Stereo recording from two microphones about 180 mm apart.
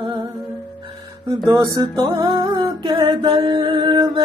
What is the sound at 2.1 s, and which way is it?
Music, 25° right (ahead or behind).